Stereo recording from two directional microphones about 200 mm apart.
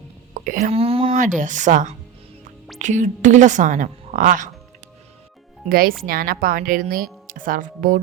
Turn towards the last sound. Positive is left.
turn(degrees=-40)  # may be behind; listen again after turning